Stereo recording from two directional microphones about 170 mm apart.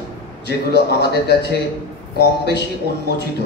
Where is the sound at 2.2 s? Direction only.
90° left.